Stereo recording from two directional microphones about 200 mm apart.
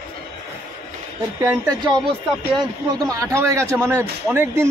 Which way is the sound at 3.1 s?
15° right (ahead or behind).